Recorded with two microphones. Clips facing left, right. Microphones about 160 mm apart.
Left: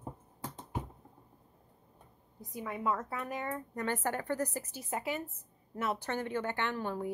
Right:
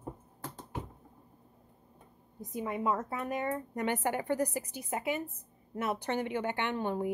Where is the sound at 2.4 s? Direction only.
20° right (ahead or behind).